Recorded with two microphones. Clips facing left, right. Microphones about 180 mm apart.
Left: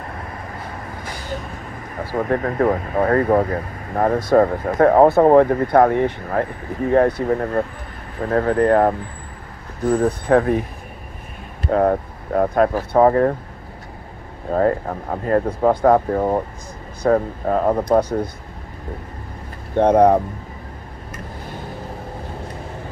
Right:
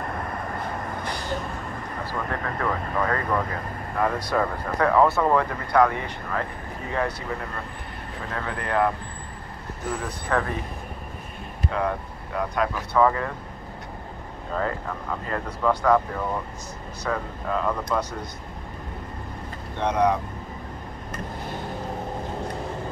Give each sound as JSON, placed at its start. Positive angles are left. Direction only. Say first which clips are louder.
{"t": 2.1, "sound": "speech", "louder": "left 11 dB", "side_deg": 40}
{"t": 8.3, "sound": "speech", "louder": "left 14 dB", "side_deg": 40}
{"t": 11.7, "sound": "speech", "louder": "left 11 dB", "side_deg": 45}
{"t": 14.5, "sound": "speech", "louder": "left 10 dB", "side_deg": 45}
{"t": 19.8, "sound": "speech", "louder": "left 9 dB", "side_deg": 55}